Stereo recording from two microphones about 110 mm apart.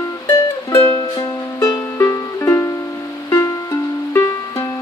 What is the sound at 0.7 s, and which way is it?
Music, 30° left (ahead or behind).